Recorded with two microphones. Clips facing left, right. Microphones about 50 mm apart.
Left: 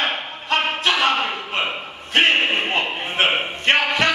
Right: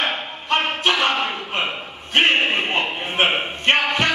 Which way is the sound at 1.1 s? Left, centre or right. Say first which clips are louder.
Left 1 dB; left.